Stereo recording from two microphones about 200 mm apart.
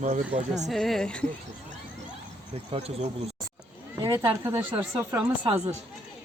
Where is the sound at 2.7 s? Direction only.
30° right (ahead or behind).